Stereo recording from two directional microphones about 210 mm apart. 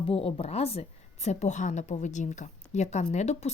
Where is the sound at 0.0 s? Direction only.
25° left (ahead or behind).